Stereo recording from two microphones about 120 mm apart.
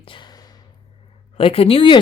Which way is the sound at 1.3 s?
50° left (ahead or behind).